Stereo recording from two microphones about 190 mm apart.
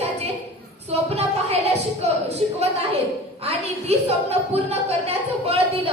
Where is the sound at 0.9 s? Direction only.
35° right (ahead or behind).